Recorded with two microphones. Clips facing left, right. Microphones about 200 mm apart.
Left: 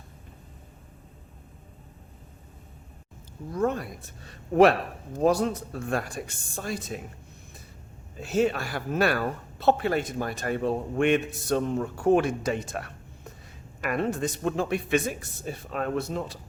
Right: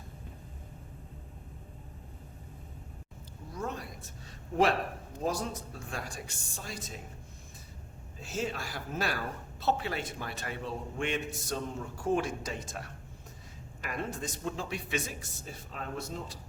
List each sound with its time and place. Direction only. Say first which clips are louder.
3.5 s speech: left 11 dB; 60° left (ahead or behind)
5.2 s speech: left 10 dB; 65° left (ahead or behind)
8.2 s speech: left 11 dB; 65° left (ahead or behind)